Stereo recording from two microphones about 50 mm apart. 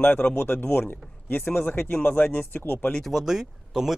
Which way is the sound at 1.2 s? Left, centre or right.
Left.